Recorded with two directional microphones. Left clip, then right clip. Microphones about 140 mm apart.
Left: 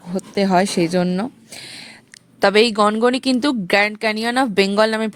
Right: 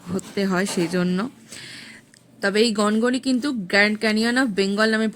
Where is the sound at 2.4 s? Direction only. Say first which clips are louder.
Left 6 dB; 55° left (ahead or behind).